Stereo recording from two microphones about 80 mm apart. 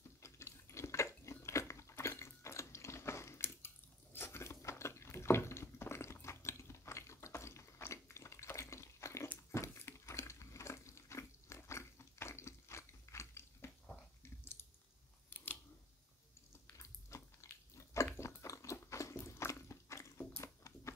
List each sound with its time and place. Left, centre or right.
0.2 s a sound: left
14.4 s chewing: left
15.2 s scissors: left
16.7 s chewing: left
19.1 s a sound: left
20.2 s biting: left